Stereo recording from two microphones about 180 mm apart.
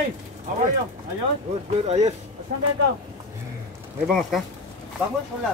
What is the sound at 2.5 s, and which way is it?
Speech, 50° right (ahead or behind).